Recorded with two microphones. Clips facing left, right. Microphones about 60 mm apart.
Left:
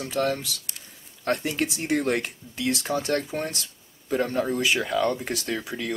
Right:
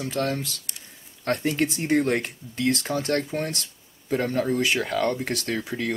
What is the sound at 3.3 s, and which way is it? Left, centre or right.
Speech, centre.